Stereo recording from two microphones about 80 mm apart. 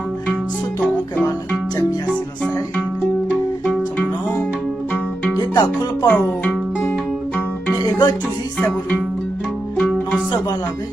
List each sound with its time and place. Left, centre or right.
0.8 s music: centre
3.7 s music: centre
5.5 s music: left
6.1 s speech: centre
7.9 s music: left
9.7 s music: centre